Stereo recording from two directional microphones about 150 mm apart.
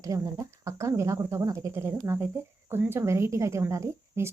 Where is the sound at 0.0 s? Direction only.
20° right (ahead or behind).